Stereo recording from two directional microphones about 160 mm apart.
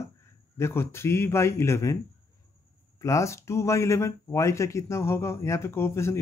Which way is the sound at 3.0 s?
20° left (ahead or behind).